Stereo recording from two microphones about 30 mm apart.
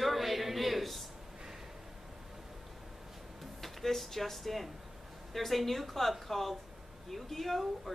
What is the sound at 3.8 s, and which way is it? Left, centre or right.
A woman's voice, centre.